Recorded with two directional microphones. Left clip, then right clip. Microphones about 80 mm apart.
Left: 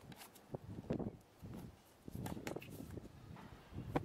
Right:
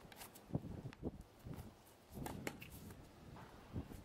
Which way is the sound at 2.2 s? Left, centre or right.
Centre.